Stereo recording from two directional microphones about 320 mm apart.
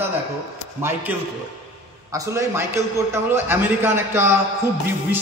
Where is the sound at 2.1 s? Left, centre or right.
Centre.